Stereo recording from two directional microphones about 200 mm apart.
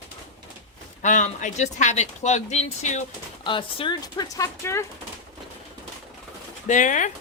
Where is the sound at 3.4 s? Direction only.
25° left (ahead or behind).